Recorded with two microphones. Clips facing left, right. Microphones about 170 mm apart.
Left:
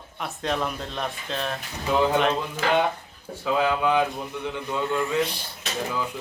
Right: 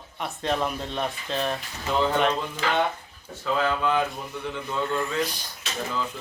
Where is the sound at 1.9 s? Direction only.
10° left (ahead or behind).